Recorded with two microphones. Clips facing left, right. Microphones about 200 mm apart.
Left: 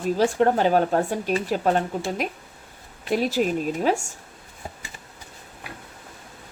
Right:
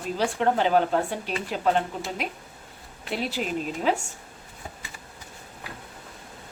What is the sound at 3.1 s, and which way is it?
Speech, 45° left (ahead or behind).